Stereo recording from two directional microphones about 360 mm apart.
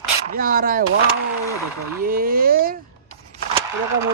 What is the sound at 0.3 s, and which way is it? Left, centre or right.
Speech, right.